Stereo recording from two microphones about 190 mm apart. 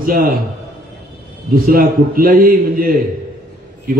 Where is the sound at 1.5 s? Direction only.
50° right (ahead or behind).